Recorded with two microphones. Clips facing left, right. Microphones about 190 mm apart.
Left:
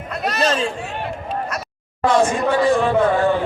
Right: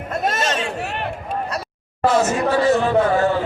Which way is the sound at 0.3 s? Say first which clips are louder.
Left 3 dB; 35° left (ahead or behind).